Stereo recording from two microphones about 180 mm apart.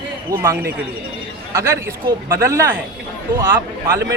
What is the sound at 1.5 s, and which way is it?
Speech, 15° right (ahead or behind).